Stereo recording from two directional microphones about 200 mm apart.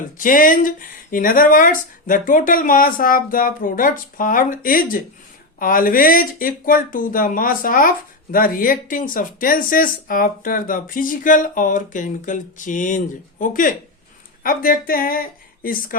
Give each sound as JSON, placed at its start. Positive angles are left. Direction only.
{"t": 0.2, "sound": "speech", "side_deg": 45}